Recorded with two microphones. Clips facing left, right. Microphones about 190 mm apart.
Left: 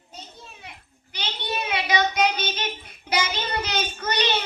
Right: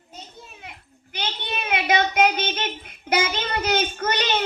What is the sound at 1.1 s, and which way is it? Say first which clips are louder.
Child singing: even; 50° right (ahead or behind).